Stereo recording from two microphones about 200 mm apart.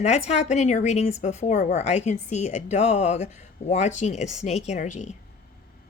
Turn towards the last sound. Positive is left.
turn(degrees=35)  # may be behind; listen again after turning